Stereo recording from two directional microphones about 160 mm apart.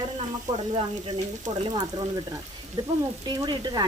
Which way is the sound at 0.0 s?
35° right (ahead or behind).